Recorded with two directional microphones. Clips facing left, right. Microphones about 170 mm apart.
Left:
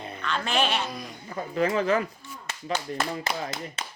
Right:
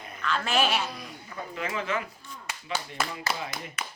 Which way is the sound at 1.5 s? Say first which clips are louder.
Left 8 dB; 40° left (ahead or behind).